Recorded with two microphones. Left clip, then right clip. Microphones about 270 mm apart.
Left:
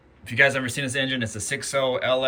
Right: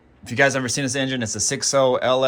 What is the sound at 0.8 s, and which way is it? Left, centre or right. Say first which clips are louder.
Speech: right 2 dB; centre.